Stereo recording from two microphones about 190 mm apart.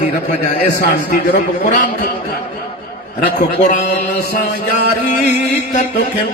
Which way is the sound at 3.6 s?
40° left (ahead or behind).